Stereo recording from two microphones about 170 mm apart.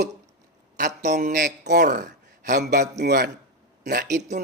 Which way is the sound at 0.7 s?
45° right (ahead or behind).